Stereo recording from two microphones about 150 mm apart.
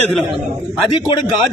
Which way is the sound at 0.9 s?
30° left (ahead or behind).